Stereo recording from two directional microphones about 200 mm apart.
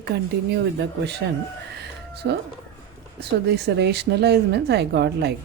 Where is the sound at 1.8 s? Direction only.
55° right (ahead or behind).